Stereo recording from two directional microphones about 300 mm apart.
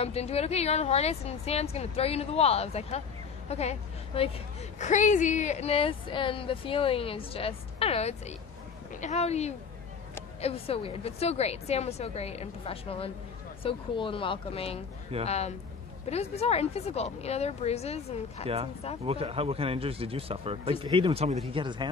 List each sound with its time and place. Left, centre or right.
0.0 s a woman's voice: left
19.0 s speech: centre